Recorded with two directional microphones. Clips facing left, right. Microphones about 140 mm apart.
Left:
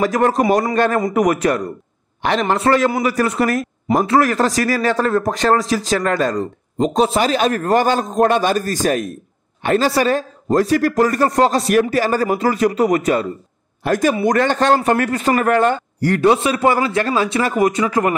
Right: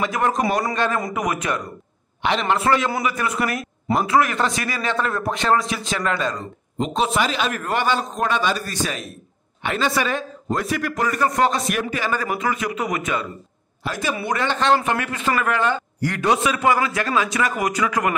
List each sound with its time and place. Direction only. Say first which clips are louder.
0.0 s a man's voice: left 6 dB; 40° left (ahead or behind)